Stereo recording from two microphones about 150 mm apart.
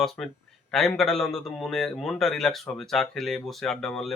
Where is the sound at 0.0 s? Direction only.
Centre (ahead or behind).